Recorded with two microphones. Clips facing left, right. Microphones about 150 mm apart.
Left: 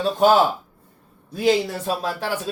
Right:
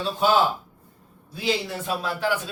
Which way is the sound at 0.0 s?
45° left (ahead or behind).